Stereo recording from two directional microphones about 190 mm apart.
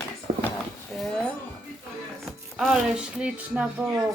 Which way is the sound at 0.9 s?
Centre (ahead or behind).